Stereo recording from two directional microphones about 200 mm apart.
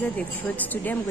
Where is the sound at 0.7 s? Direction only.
10° left (ahead or behind).